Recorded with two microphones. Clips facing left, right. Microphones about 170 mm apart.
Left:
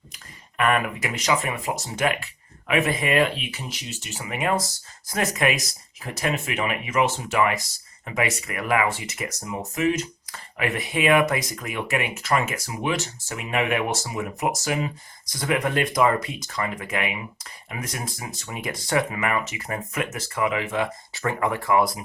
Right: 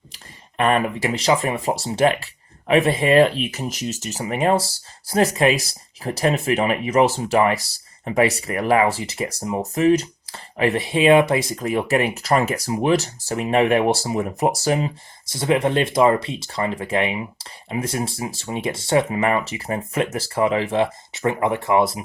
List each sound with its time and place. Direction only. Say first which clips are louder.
0.1 s speech: right 2 dB; 30° right (ahead or behind)